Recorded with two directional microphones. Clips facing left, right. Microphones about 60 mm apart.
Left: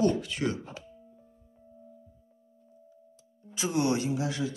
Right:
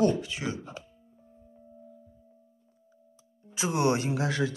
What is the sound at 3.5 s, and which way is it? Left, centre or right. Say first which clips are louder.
Speech: right 1 dB; right.